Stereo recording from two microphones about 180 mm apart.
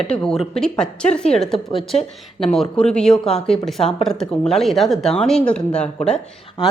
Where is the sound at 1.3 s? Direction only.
35° left (ahead or behind).